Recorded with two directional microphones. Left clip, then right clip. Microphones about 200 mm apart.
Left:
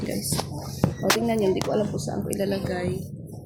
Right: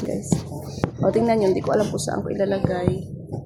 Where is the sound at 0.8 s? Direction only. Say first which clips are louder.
Even; 50° right (ahead or behind).